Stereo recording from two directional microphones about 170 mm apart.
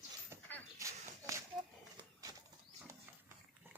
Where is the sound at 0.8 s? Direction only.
20° right (ahead or behind).